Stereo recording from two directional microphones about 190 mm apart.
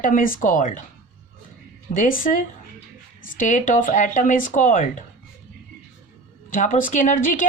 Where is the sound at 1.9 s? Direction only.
45° left (ahead or behind).